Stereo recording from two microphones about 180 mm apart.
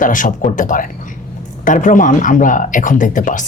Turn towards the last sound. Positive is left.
turn(degrees=45)  # may be behind; listen again after turning